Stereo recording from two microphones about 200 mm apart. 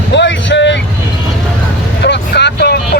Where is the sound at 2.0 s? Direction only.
60° left (ahead or behind).